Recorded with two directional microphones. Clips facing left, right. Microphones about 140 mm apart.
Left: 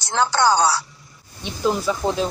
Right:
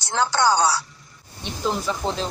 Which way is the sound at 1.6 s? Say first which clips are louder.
Left 4 dB; 10° left (ahead or behind).